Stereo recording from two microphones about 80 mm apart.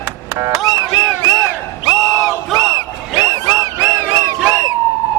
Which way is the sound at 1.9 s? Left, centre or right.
Centre.